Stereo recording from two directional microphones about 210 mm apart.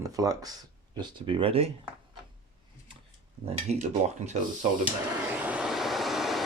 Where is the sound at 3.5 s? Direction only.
30° right (ahead or behind).